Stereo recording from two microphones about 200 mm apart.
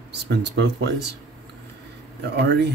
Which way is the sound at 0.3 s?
60° right (ahead or behind).